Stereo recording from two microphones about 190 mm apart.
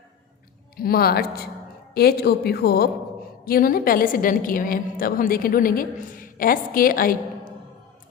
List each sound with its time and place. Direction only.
0.8 s a woman's voice: 55° left (ahead or behind)